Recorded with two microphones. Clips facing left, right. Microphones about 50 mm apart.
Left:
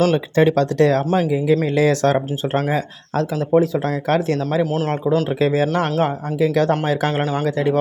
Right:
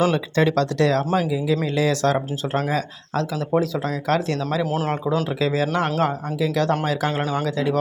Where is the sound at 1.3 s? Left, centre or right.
Left.